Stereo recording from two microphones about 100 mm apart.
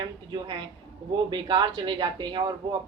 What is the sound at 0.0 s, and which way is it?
A woman's voice, 50° right (ahead or behind).